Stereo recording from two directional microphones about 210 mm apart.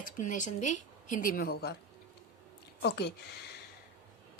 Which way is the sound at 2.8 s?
50° left (ahead or behind).